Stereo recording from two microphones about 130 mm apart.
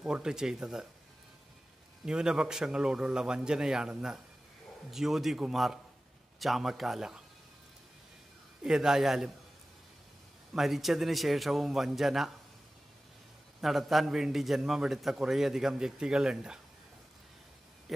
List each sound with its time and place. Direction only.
0.0 s a man's voice: 5° right (ahead or behind)
2.0 s a man's voice: 5° right (ahead or behind)
8.6 s a man's voice: 5° right (ahead or behind)
10.5 s a man's voice: centre (ahead or behind)
13.6 s a man's voice: centre (ahead or behind)